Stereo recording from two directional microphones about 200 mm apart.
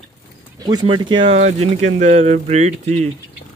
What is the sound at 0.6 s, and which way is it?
Speech, 25° right (ahead or behind).